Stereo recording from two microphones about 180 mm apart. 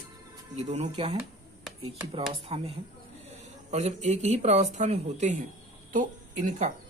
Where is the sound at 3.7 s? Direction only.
40° right (ahead or behind).